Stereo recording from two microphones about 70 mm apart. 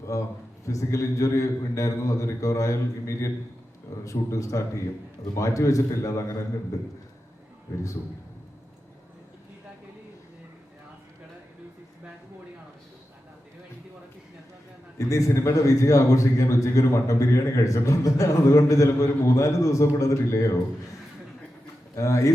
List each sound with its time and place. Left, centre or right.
0.1 s a man's voice: left
14.9 s a man's voice: left
21.9 s a man's voice: left